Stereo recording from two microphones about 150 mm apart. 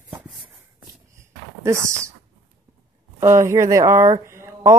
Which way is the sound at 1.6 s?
20° right (ahead or behind).